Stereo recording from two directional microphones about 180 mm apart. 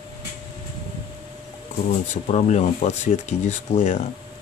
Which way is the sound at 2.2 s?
40° left (ahead or behind).